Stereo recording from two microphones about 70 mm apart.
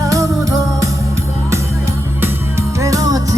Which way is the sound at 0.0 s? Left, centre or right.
Right.